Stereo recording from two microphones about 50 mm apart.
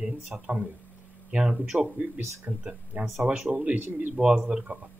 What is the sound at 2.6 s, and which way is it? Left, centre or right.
A man's voice, right.